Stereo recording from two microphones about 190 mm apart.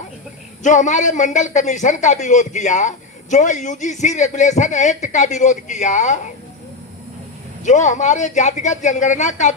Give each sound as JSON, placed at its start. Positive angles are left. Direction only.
{"t": 0.6, "sound": "a man's voice", "side_deg": 40}
{"t": 7.6, "sound": "a man's voice", "side_deg": 40}